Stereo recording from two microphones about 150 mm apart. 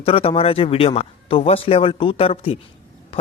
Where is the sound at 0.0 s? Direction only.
40° left (ahead or behind).